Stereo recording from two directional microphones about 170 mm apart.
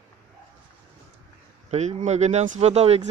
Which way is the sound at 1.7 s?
40° right (ahead or behind).